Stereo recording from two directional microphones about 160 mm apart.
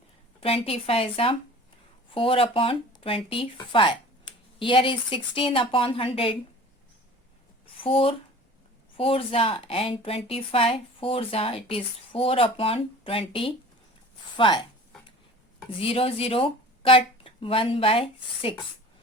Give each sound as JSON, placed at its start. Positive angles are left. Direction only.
{"t": 0.3, "sound": "a woman's voice", "side_deg": 35}
{"t": 7.8, "sound": "a woman's voice", "side_deg": 35}
{"t": 14.3, "sound": "a sound", "side_deg": 30}
{"t": 15.7, "sound": "a woman's voice", "side_deg": 35}